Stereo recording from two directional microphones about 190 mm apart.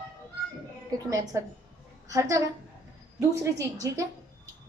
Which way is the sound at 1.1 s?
20° right (ahead or behind).